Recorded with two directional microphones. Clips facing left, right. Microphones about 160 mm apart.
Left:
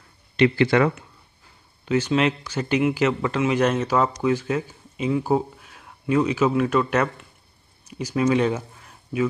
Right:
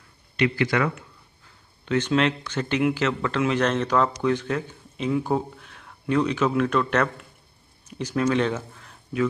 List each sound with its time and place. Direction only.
0.4 s speech: 30° left (ahead or behind)
1.9 s speech: 5° left (ahead or behind)